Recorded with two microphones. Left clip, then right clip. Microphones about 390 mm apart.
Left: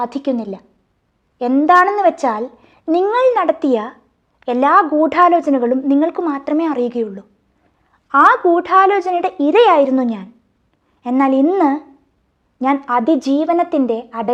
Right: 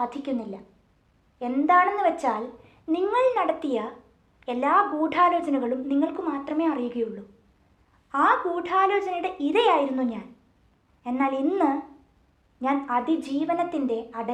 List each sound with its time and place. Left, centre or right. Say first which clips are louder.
0.0 s a woman's voice: left 9 dB; left